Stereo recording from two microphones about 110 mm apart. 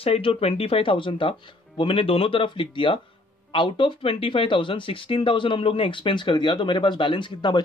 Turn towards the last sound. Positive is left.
turn(degrees=45)  # may be behind; listen again after turning